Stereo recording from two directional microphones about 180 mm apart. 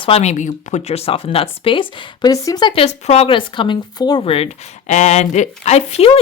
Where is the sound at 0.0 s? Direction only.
35° left (ahead or behind).